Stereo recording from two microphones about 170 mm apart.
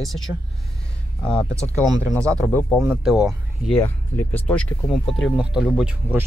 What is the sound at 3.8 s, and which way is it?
Speech, 10° left (ahead or behind).